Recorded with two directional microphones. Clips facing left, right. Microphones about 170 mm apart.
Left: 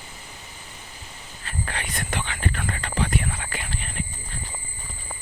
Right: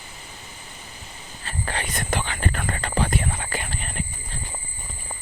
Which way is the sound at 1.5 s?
35° right (ahead or behind).